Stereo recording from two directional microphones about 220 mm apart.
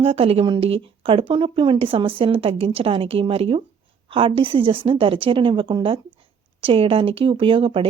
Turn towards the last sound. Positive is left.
turn(degrees=-25)  # may be behind; listen again after turning